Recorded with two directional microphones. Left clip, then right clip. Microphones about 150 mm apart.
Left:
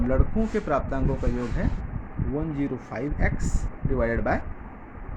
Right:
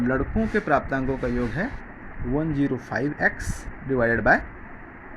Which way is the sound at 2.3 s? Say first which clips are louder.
Right 4 dB; 40° right (ahead or behind).